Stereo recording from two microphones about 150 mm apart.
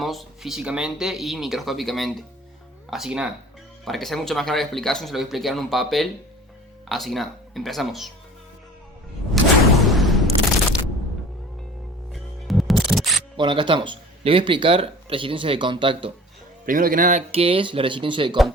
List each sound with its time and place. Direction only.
0.0 s speech: centre (ahead or behind)
9.4 s a sound: centre (ahead or behind)
12.1 s music: centre (ahead or behind)
13.3 s speech: 35° right (ahead or behind)
16.6 s speech: 65° right (ahead or behind); by 18.3 s 35° right (ahead or behind)